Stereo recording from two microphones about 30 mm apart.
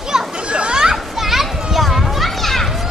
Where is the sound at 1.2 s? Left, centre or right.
Centre.